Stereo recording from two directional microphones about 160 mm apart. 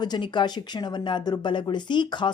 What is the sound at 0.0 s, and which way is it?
A woman's voice, 25° left (ahead or behind).